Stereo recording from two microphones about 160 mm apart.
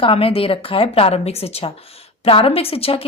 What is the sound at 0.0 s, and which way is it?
A woman's voice, 35° left (ahead or behind).